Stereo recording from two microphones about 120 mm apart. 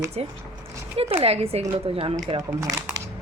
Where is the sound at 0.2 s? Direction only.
55° right (ahead or behind).